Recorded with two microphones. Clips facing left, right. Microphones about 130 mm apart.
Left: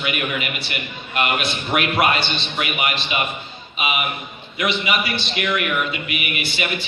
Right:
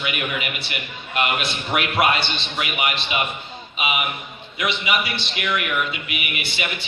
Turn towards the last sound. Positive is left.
turn(degrees=-20)  # may be behind; listen again after turning